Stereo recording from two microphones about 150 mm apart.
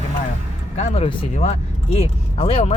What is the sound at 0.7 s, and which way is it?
Speech, 45° left (ahead or behind).